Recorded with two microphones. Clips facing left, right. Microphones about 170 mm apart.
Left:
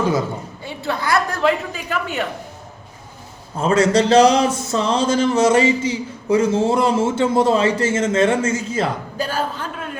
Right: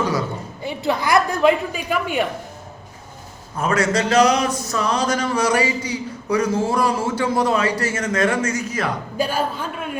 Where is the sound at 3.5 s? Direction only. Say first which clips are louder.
Left 4 dB; 30° left (ahead or behind).